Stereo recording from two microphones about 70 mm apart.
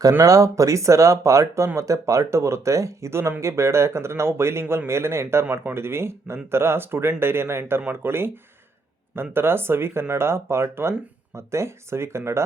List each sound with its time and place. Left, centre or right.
0.2 s speech: right
9.3 s speech: right